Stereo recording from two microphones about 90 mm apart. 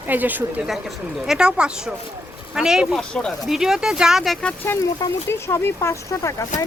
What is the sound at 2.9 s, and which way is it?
Speech, 10° left (ahead or behind).